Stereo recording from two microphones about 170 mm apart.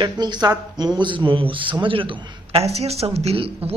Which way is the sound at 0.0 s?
25° right (ahead or behind).